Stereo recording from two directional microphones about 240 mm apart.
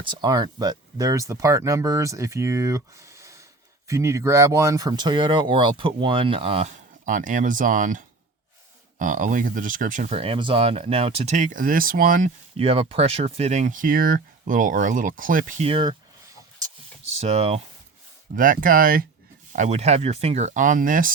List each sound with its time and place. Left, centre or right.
0.0 s speech: centre
17.0 s a sound: right
18.3 s speech: right